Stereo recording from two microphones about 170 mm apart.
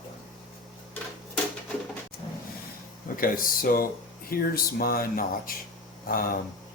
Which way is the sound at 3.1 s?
55° left (ahead or behind).